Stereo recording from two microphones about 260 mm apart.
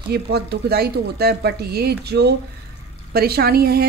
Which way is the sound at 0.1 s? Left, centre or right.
Right.